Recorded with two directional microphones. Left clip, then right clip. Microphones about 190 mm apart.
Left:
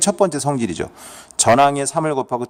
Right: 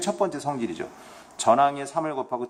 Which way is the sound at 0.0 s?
55° left (ahead or behind).